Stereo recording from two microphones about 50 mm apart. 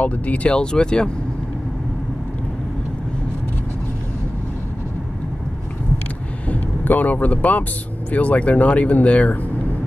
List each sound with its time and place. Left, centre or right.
0.0 s speech: left
6.8 s speech: left